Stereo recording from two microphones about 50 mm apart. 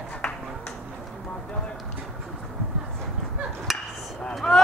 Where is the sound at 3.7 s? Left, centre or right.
Centre.